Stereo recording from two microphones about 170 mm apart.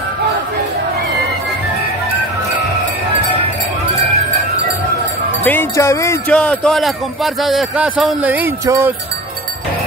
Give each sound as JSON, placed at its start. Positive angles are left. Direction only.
{"t": 5.4, "sound": "music", "side_deg": 10}
{"t": 6.3, "sound": "speech", "side_deg": 5}